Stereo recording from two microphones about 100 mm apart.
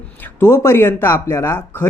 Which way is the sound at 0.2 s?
25° left (ahead or behind).